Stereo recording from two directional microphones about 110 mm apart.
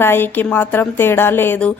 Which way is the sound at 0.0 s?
20° left (ahead or behind).